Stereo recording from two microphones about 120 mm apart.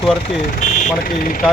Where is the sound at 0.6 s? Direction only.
90° left.